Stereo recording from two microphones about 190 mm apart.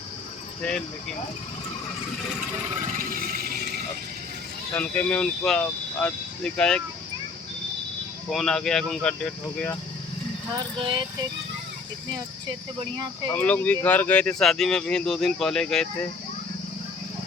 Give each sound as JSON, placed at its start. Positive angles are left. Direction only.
{"t": 2.8, "sound": "vehicle", "side_deg": -45}
{"t": 4.7, "sound": "speech", "side_deg": 10}
{"t": 8.3, "sound": "speech", "side_deg": 0}
{"t": 10.8, "sound": "speech", "side_deg": -25}
{"t": 13.3, "sound": "speech", "side_deg": 10}